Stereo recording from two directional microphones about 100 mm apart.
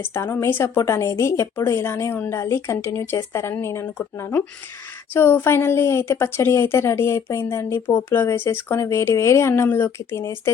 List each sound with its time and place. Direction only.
0.0 s a woman's voice: 25° left (ahead or behind)